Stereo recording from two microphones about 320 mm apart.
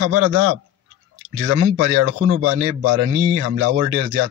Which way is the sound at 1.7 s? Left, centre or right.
Right.